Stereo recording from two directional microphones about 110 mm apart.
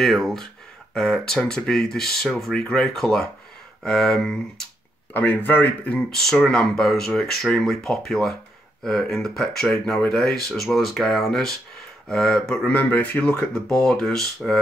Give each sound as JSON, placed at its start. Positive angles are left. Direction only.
{"t": 0.0, "sound": "speech", "side_deg": 0}
{"t": 5.1, "sound": "speech", "side_deg": 15}